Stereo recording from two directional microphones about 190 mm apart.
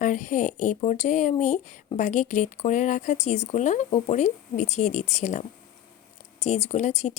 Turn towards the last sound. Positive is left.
turn(degrees=35)  # may be behind; listen again after turning